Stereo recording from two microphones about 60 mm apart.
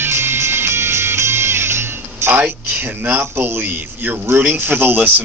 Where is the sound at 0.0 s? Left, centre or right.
Right.